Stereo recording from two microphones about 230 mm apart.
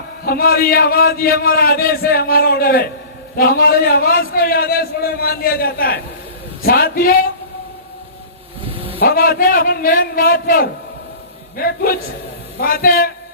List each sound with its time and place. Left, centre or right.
0.3 s a man's voice: left
8.7 s a sound: right
9.0 s a man's voice: left